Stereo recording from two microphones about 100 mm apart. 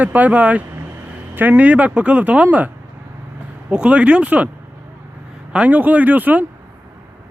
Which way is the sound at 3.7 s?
10° right (ahead or behind).